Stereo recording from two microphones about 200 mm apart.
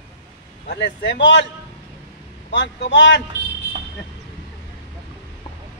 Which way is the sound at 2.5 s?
60° left (ahead or behind).